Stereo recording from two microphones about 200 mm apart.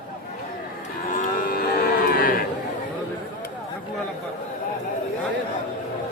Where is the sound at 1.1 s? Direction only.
40° left (ahead or behind).